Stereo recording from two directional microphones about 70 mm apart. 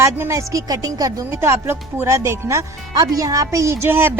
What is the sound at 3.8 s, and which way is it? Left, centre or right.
Speech, right.